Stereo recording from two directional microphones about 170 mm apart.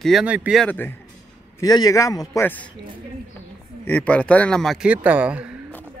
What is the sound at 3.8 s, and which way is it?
Speech, 10° left (ahead or behind).